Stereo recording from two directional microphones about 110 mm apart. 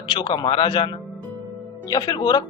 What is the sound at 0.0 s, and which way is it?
Speech, 45° left (ahead or behind).